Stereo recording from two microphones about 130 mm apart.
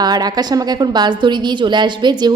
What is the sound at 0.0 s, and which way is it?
A woman's voice, 30° right (ahead or behind).